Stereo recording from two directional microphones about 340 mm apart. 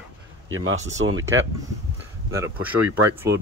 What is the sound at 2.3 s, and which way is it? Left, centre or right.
Speech, centre.